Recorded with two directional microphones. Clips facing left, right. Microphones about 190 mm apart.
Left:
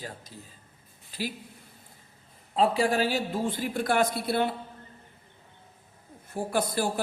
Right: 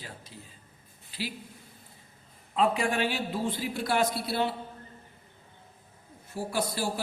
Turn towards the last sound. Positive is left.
turn(degrees=55)  # may be behind; listen again after turning